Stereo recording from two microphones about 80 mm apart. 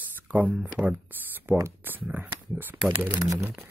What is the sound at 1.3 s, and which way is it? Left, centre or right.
Speech, right.